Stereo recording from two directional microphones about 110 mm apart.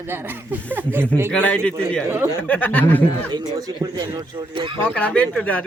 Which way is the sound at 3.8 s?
30° right (ahead or behind).